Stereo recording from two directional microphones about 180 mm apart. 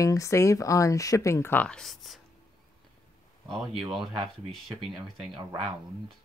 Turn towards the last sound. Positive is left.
turn(degrees=0)  # may be behind; listen again after turning